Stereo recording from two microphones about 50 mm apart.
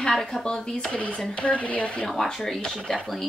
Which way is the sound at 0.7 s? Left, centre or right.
Left.